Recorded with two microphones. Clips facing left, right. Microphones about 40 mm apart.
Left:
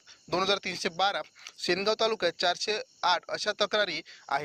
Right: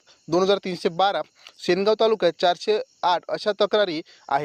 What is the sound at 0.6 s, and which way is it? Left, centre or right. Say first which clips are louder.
Speech: right 7 dB; centre.